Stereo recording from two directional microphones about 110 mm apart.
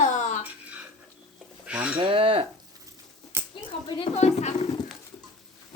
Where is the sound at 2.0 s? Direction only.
55° right (ahead or behind).